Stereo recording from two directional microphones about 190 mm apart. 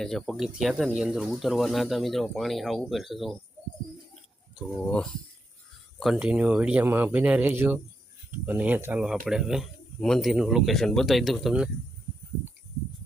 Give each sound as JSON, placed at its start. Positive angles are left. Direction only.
{"t": 0.0, "sound": "speech", "side_deg": 0}
{"t": 4.1, "sound": "a sound", "side_deg": 0}
{"t": 6.0, "sound": "speech", "side_deg": -5}